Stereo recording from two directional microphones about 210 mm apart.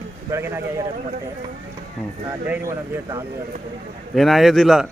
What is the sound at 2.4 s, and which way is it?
Speech, 10° right (ahead or behind).